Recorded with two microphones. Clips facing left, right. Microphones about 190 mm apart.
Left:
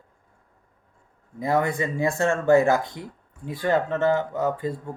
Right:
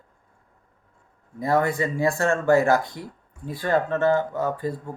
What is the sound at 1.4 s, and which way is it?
Speech, 20° left (ahead or behind).